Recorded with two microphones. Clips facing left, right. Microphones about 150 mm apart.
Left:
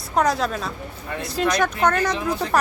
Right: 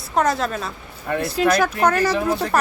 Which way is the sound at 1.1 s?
55° right (ahead or behind).